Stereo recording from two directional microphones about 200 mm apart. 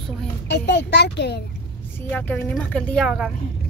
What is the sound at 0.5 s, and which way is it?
Speech, 60° left (ahead or behind).